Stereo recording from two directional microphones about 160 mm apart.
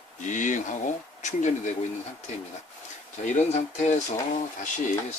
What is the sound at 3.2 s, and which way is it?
Speech, 45° left (ahead or behind).